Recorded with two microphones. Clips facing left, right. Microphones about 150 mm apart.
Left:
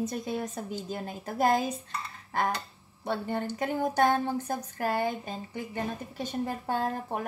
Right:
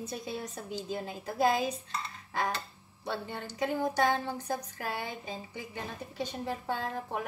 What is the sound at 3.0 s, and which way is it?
A woman's voice, 50° left (ahead or behind).